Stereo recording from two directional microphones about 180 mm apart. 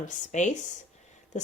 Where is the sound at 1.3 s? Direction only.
40° left (ahead or behind).